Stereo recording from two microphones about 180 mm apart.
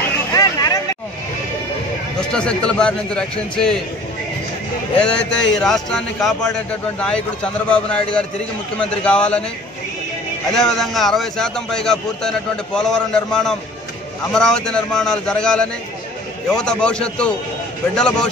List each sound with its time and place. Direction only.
0.3 s vehicle: 20° left (ahead or behind)
2.1 s a man's voice: 5° left (ahead or behind)
5.0 s a man's voice: 5° left (ahead or behind)
10.5 s a man's voice: 5° left (ahead or behind)